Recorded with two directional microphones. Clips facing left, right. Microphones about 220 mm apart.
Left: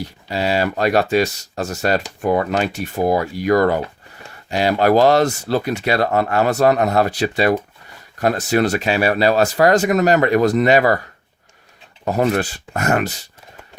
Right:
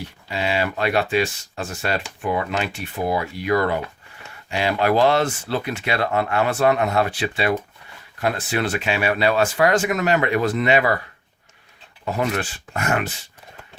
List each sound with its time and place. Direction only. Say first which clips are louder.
0.0 s speech: left 4 dB; 40° left (ahead or behind)
12.0 s speech: left 6 dB; 40° left (ahead or behind)